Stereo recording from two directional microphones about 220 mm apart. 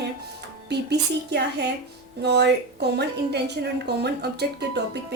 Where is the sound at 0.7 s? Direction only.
50° right (ahead or behind).